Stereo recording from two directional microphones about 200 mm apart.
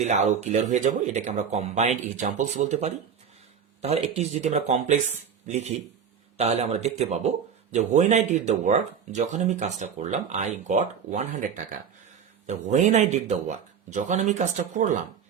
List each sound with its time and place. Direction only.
0.0 s speech: 35° right (ahead or behind)